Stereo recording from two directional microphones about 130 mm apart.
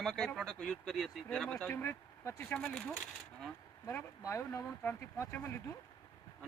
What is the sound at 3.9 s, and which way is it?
Speech, 20° left (ahead or behind).